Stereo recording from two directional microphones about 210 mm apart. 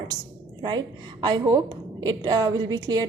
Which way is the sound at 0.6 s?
20° right (ahead or behind).